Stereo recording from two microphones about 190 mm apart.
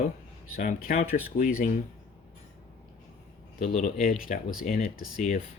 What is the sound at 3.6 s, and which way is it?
Speech, 45° left (ahead or behind).